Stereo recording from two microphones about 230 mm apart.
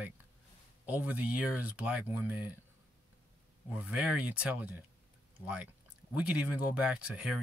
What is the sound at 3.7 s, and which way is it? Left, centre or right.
Speech, centre.